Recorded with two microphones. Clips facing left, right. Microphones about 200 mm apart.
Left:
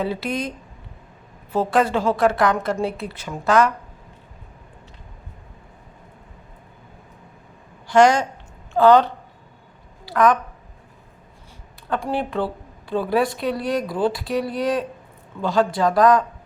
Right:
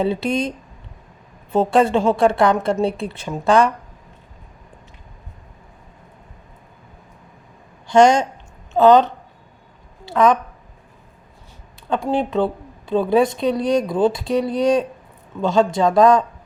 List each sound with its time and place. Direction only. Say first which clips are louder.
0.0 s speech: right 5 dB; 25° right (ahead or behind)
1.5 s speech: right 4 dB; 25° right (ahead or behind)
7.9 s a woman's voice: right 2 dB; 25° right (ahead or behind)
12.0 s speech: right 6 dB; 20° right (ahead or behind)